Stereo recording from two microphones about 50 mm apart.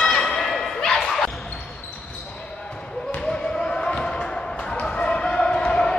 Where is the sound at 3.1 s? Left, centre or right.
Centre.